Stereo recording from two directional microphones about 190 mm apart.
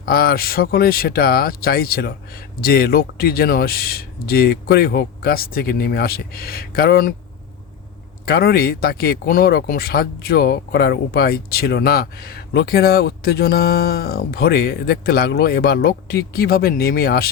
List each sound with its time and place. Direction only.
0.0 s speech: 55° left (ahead or behind)
8.2 s speech: 55° left (ahead or behind)